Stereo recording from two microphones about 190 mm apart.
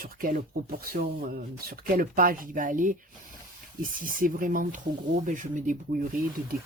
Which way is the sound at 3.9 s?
45° right (ahead or behind).